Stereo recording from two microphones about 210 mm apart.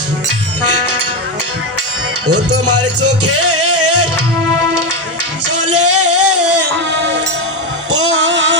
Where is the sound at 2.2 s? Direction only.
90° right.